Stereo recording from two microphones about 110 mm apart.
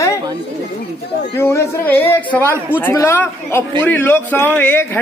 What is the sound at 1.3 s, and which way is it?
A man's voice, 25° left (ahead or behind).